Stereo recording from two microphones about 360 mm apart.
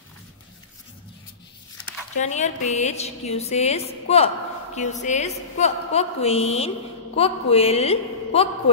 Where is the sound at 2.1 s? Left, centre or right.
Centre.